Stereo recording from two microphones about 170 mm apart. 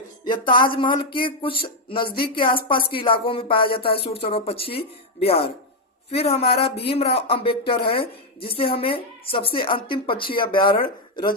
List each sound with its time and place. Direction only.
0.3 s speech: 30° left (ahead or behind)